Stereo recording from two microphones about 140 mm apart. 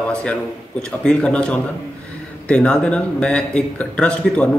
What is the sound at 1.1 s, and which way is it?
A man's voice, 5° left (ahead or behind).